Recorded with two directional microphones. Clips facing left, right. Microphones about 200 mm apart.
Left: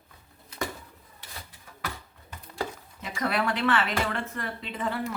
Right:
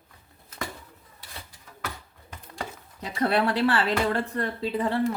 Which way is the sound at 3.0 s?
30° right (ahead or behind).